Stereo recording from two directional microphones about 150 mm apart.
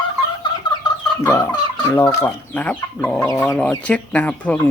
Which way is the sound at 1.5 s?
30° left (ahead or behind).